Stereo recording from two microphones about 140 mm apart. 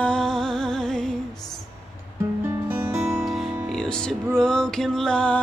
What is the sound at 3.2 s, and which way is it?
Music, centre (ahead or behind).